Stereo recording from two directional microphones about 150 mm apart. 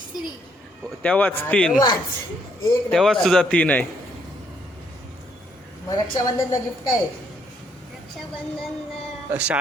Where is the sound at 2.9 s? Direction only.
5° left (ahead or behind).